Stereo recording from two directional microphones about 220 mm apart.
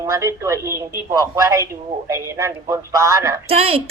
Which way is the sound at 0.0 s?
15° right (ahead or behind).